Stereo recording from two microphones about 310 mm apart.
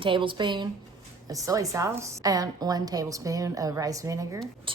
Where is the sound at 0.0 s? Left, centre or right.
Centre.